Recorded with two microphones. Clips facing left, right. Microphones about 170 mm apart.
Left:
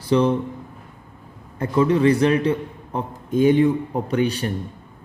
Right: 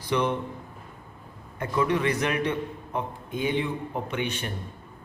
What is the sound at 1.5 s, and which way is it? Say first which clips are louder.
A man's voice: left 7 dB; 30° left (ahead or behind).